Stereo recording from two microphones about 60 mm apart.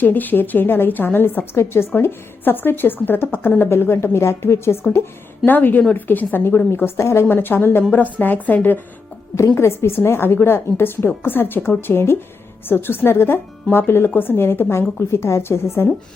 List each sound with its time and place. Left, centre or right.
0.0 s speech: left
1.5 s a woman's voice: left
5.5 s a woman's voice: left
7.3 s speech: left
9.6 s speech: left